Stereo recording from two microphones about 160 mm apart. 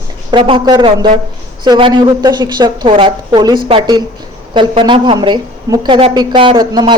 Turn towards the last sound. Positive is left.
turn(degrees=-30)  # may be behind; listen again after turning